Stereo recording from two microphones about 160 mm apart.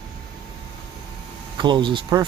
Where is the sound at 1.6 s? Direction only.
30° right (ahead or behind).